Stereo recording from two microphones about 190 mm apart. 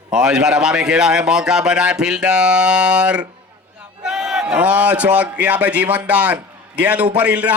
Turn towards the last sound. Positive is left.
turn(degrees=-5)  # may be behind; listen again after turning